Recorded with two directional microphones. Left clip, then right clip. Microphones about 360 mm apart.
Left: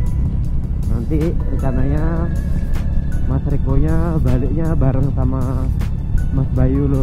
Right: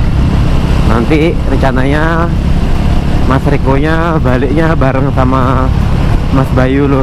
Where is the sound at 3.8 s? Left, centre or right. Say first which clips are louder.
Right 11 dB; centre.